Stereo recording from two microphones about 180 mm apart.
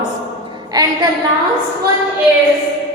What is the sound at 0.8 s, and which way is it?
Speech, 20° right (ahead or behind).